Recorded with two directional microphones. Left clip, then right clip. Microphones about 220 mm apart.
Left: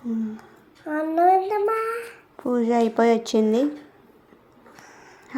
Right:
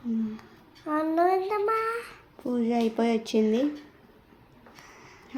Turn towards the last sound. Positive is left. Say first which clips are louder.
# left 5 dB
turn(degrees=15)  # may be behind; listen again after turning